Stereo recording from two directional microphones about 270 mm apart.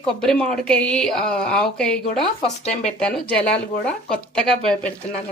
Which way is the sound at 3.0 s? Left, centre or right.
Centre.